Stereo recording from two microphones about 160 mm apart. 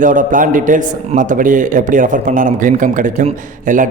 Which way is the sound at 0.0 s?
55° right (ahead or behind).